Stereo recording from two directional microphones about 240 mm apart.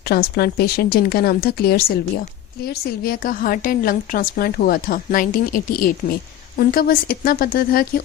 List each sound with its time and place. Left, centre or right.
0.1 s a woman's voice: left